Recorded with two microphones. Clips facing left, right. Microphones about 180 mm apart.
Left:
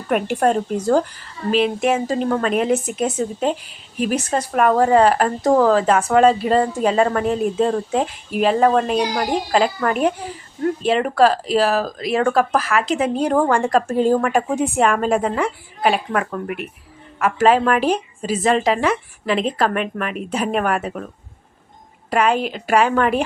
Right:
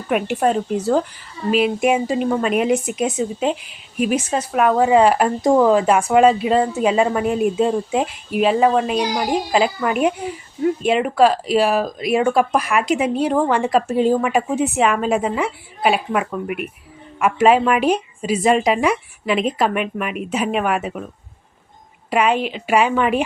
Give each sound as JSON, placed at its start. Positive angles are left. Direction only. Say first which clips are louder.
{"t": 0.1, "sound": "a woman's voice", "louder": "left 1 dB", "side_deg": -5}
{"t": 22.1, "sound": "speech", "louder": "even", "side_deg": -10}
{"t": 22.4, "sound": "speech", "louder": "even", "side_deg": 40}
{"t": 22.6, "sound": "speech", "louder": "left 1 dB", "side_deg": -10}